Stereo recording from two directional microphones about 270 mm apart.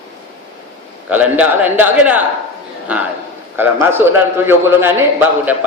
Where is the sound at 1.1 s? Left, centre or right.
Centre.